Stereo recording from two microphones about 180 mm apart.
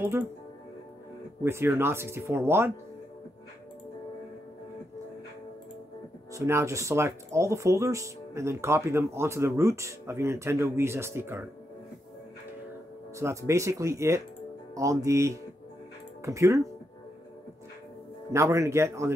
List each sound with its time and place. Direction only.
1.4 s speech: 15° right (ahead or behind)
6.3 s speech: 15° right (ahead or behind)
13.2 s speech: 15° right (ahead or behind)
18.3 s speech: 15° right (ahead or behind)